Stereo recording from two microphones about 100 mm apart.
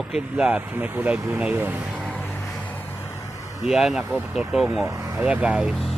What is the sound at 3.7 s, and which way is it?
Speech, 5° right (ahead or behind).